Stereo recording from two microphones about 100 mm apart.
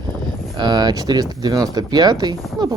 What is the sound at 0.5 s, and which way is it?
Speech, 45° right (ahead or behind).